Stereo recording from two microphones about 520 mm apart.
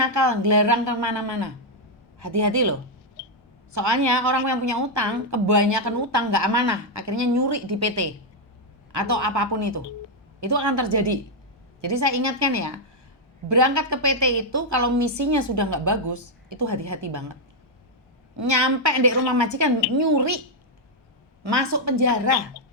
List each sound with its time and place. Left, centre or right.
0.1 s a woman's voice: right
3.8 s a woman's voice: right
18.4 s a woman's voice: right
21.5 s a woman's voice: right